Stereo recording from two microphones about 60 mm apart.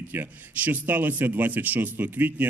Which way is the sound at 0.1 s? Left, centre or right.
Right.